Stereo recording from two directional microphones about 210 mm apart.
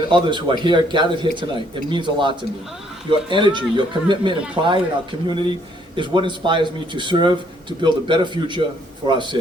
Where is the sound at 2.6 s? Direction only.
Centre (ahead or behind).